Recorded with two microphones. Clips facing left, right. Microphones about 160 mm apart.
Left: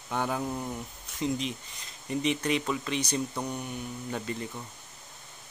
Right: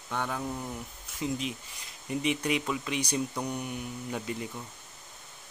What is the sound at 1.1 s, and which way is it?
Speech, 5° right (ahead or behind).